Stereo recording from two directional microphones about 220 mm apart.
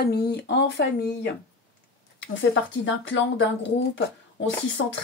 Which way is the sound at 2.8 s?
55° left (ahead or behind).